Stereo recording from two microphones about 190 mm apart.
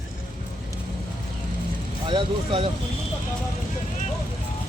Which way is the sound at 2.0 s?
25° right (ahead or behind).